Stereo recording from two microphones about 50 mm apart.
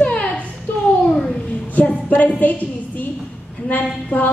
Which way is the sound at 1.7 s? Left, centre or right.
Left.